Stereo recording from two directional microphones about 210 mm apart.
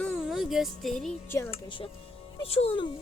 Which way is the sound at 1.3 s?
10° left (ahead or behind).